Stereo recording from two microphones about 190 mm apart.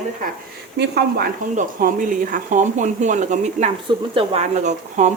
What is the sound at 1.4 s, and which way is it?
Speech, 45° right (ahead or behind).